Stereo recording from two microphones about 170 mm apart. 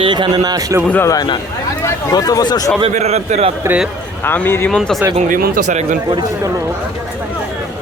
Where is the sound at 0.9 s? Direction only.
15° left (ahead or behind).